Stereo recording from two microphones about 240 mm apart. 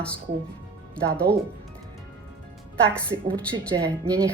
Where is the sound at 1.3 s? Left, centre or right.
Right.